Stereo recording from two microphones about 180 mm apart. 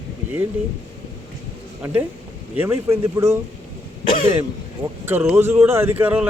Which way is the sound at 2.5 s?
15° right (ahead or behind).